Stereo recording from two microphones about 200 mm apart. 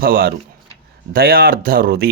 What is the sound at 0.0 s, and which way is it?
Speech, 50° right (ahead or behind).